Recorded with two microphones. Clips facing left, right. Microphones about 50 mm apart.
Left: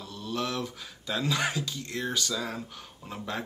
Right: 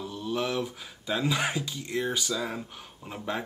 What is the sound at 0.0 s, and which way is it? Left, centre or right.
Speech, centre.